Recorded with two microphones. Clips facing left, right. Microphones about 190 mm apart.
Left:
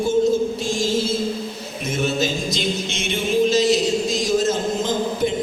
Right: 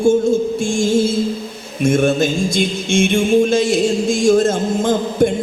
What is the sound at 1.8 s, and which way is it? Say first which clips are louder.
Music: right 8 dB; 50° right (ahead or behind).